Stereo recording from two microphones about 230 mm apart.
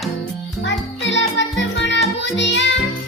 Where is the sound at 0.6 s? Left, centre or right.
Left.